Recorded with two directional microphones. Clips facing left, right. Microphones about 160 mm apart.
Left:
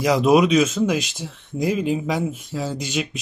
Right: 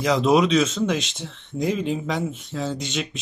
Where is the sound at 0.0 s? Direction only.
10° left (ahead or behind).